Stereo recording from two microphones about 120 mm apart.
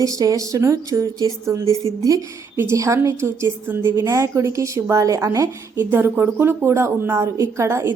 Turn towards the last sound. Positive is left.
turn(degrees=-25)  # may be behind; listen again after turning